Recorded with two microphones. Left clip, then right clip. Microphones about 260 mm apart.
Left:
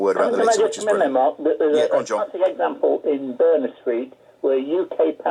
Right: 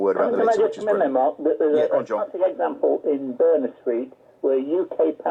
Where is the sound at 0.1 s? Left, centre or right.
Centre.